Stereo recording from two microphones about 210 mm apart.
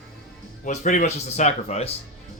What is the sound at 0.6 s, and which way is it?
Speech, 35° left (ahead or behind).